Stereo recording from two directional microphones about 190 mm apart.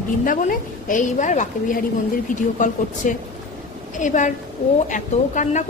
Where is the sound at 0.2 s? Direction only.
45° left (ahead or behind).